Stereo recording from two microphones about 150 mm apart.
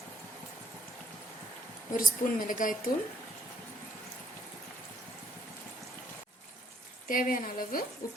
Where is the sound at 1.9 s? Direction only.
65° left (ahead or behind).